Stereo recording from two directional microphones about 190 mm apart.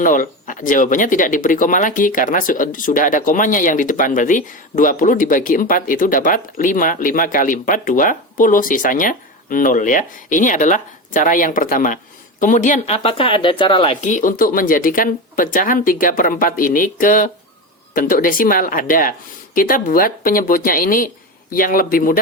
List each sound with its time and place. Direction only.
0.0 s speech: 45° left (ahead or behind)